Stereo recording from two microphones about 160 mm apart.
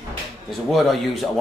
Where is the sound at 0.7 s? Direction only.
Centre (ahead or behind).